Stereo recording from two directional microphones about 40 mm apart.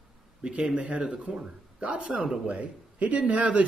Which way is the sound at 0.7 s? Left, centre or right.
Right.